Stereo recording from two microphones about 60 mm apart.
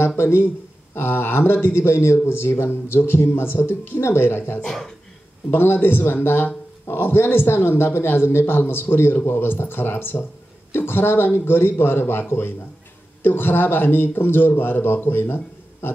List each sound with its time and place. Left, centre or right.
0.2 s a man's voice: left
4.6 s speech: centre
5.5 s a man's voice: left